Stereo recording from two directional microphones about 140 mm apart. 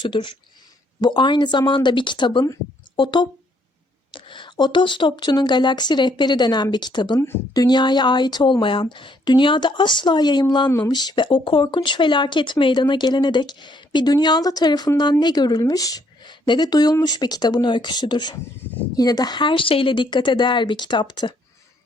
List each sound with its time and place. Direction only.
0.0 s speech: 35° left (ahead or behind)